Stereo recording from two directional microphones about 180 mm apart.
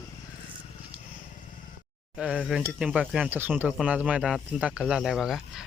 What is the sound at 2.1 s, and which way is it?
Speech, 5° right (ahead or behind).